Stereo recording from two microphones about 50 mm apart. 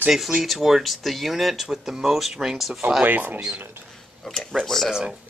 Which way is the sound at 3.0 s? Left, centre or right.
Right.